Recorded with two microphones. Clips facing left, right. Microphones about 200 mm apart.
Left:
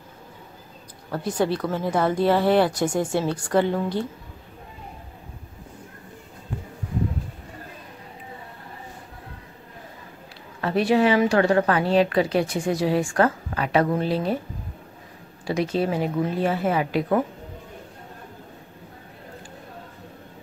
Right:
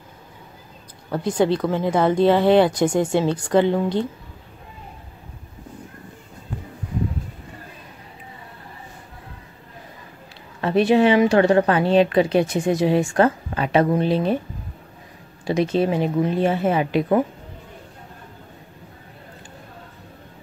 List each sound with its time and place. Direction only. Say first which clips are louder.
1.1 s a woman's voice: right 4 dB; 20° right (ahead or behind)
10.6 s a woman's voice: right 3 dB; 20° right (ahead or behind)
15.4 s a woman's voice: right 4 dB; 20° right (ahead or behind)